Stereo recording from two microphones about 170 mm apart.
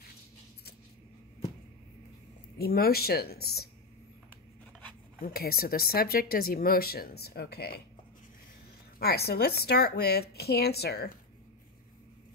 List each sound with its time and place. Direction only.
2.6 s speech: 65° left (ahead or behind)
5.2 s speech: 60° left (ahead or behind)
9.0 s a woman's voice: 70° left (ahead or behind)